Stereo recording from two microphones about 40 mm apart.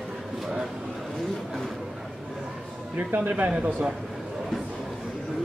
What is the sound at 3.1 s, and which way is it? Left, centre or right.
Speech, right.